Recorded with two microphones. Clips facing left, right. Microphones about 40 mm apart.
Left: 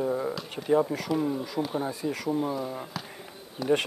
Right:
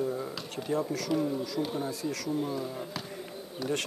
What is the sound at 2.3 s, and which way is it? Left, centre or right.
Speech, centre.